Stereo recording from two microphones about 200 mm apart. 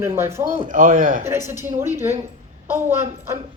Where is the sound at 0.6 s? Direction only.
40° right (ahead or behind).